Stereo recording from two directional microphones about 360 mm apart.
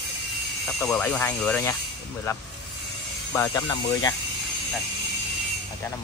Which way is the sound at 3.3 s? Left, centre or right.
Centre.